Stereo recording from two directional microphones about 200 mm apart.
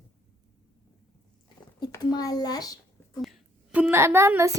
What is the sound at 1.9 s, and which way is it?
A child's voice, 20° left (ahead or behind).